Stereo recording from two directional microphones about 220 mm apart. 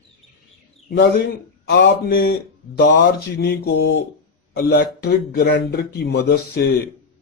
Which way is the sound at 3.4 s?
45° left (ahead or behind).